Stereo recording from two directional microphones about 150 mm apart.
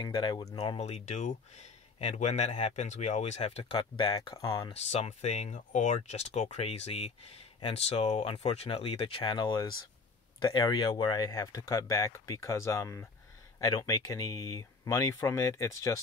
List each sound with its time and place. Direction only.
0.0 s speech: 30° left (ahead or behind)
0.6 s speech: 45° left (ahead or behind)
3.7 s speech: 30° left (ahead or behind)
4.7 s speech: 45° left (ahead or behind); by 16.0 s 20° left (ahead or behind)